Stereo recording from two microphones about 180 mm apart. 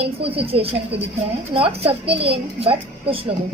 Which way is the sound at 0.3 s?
30° right (ahead or behind).